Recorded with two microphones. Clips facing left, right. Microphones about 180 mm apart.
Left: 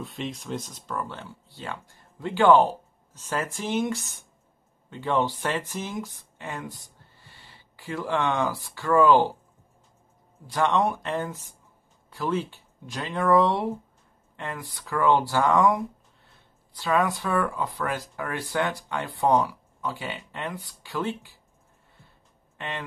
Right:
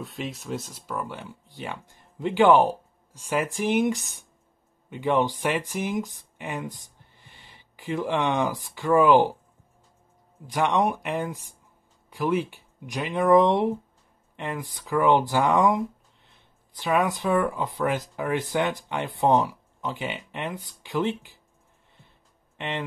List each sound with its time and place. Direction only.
0.0 s speech: centre (ahead or behind)
10.4 s speech: 15° right (ahead or behind)
22.6 s speech: 20° right (ahead or behind)